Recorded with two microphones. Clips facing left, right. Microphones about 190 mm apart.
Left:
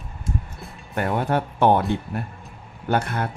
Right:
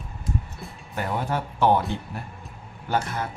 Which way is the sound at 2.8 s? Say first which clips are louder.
Left 3 dB; 60° left (ahead or behind).